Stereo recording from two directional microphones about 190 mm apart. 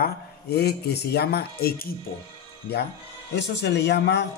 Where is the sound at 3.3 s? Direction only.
65° left (ahead or behind).